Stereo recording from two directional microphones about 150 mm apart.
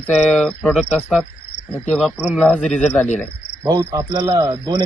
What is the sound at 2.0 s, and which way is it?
Speech, 10° right (ahead or behind).